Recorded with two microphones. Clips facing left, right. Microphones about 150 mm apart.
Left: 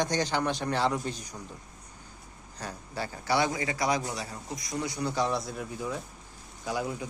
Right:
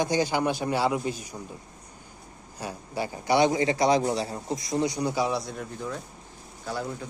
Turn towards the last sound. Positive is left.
turn(degrees=10)  # may be behind; listen again after turning